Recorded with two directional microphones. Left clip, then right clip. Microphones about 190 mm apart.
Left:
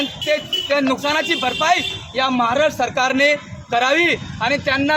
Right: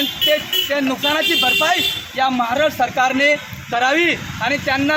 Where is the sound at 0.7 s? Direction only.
20° left (ahead or behind).